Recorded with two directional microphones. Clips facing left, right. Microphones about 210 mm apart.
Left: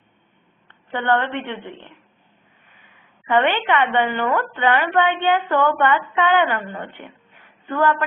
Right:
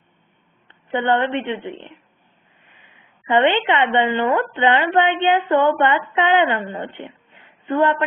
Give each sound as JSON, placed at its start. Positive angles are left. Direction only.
{"t": 0.7, "sound": "a woman's voice", "side_deg": -20}
{"t": 3.2, "sound": "a woman's voice", "side_deg": -20}